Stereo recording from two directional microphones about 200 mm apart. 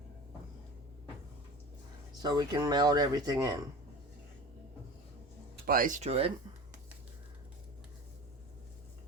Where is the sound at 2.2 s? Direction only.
20° right (ahead or behind).